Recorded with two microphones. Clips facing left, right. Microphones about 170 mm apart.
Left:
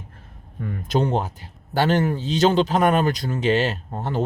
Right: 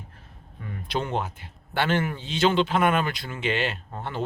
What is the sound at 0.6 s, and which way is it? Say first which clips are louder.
Speech: left 7 dB; 45° left (ahead or behind).